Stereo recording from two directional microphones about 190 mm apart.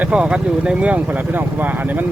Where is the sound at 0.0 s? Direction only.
5° right (ahead or behind).